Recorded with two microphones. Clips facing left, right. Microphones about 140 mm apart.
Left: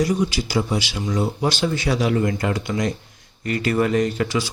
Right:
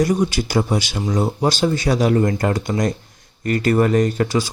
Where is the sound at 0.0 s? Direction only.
45° right (ahead or behind).